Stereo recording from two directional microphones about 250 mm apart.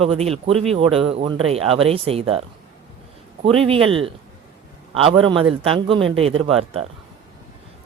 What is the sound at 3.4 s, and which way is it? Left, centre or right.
Speech, right.